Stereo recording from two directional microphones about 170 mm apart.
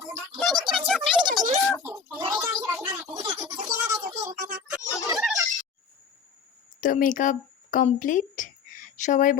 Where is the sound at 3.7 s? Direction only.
10° right (ahead or behind).